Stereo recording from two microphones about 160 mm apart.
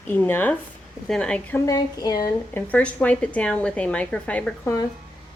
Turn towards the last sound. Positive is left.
turn(degrees=10)  # may be behind; listen again after turning